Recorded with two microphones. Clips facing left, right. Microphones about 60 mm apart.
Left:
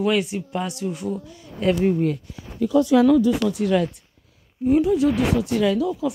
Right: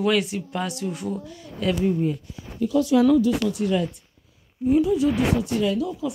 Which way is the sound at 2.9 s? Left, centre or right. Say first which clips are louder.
Left 2 dB; left.